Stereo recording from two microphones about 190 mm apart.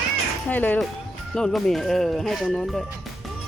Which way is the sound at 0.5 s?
10° left (ahead or behind).